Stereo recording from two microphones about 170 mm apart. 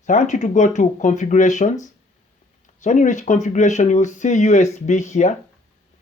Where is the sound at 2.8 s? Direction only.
45° left (ahead or behind).